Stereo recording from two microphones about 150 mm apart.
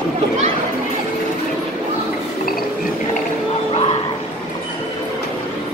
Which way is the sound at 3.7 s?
45° left (ahead or behind).